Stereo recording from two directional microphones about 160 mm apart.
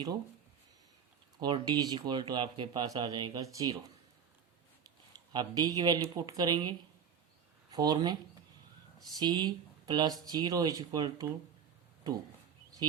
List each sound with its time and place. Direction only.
1.4 s speech: 25° right (ahead or behind)
5.3 s speech: 25° right (ahead or behind)